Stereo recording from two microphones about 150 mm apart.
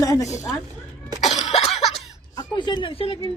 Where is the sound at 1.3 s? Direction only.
45° left (ahead or behind).